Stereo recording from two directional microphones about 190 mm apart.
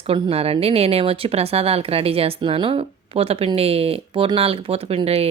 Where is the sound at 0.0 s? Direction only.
30° right (ahead or behind).